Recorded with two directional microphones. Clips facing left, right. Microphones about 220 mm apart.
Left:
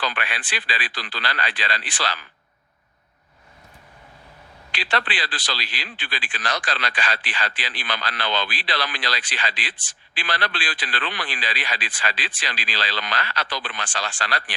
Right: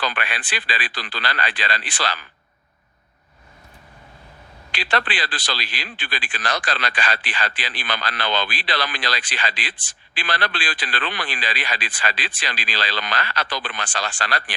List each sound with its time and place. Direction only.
0.0 s a man's voice: 50° right (ahead or behind)
4.7 s a man's voice: 50° right (ahead or behind)